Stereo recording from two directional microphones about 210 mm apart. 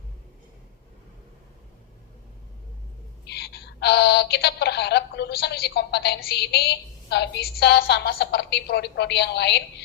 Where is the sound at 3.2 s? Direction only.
50° left (ahead or behind).